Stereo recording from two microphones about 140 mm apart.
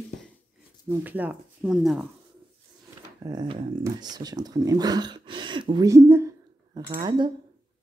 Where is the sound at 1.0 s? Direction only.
10° right (ahead or behind).